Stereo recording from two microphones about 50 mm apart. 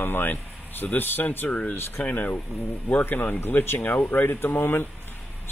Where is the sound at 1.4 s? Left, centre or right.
Left.